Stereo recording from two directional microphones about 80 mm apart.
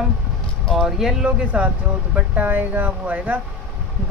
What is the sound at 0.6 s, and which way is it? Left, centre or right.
Speech, centre.